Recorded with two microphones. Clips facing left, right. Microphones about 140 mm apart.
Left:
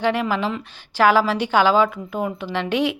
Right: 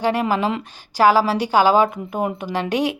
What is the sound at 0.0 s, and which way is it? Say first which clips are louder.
A woman's voice: right 2 dB; 40° right (ahead or behind).